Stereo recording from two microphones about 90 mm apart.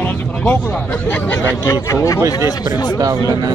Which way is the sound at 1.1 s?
20° left (ahead or behind).